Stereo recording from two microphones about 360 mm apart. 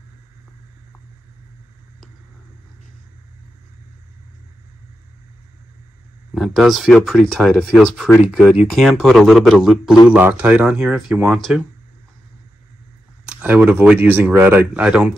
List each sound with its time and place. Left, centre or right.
6.3 s speech: centre
13.2 s speech: centre